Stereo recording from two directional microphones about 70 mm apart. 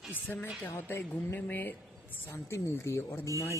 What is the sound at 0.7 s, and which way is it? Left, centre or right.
Speech, left.